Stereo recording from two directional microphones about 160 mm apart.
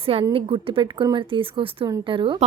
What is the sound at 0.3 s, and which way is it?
A woman's voice, 35° right (ahead or behind).